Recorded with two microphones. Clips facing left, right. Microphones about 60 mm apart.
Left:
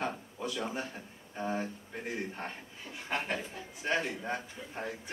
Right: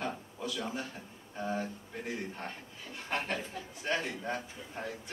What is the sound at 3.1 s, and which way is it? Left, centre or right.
A man's voice, centre.